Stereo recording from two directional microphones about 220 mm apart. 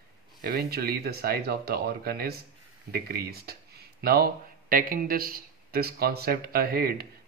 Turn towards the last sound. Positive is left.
turn(degrees=-45)  # may be behind; listen again after turning